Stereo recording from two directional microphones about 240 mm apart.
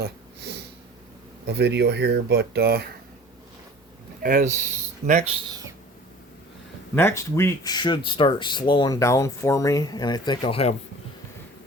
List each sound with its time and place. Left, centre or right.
1.5 s speech: right
4.2 s speech: right
6.9 s speech: centre